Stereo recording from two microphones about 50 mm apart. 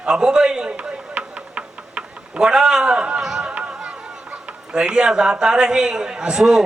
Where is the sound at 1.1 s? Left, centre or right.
Right.